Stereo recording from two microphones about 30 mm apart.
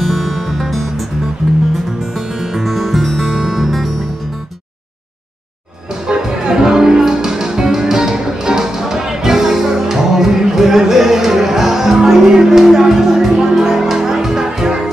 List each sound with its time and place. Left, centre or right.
0.0 s music: centre
1.5 s music: centre
3.3 s music: centre
6.0 s music: right